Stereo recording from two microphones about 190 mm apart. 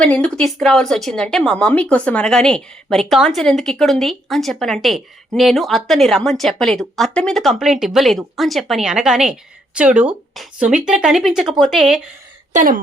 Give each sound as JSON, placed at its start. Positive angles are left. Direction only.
{"t": 0.0, "sound": "speech", "side_deg": 5}
{"t": 12.5, "sound": "speech", "side_deg": -45}